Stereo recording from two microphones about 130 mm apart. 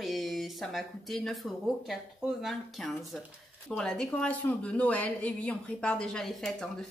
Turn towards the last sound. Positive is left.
turn(degrees=5)  # may be behind; listen again after turning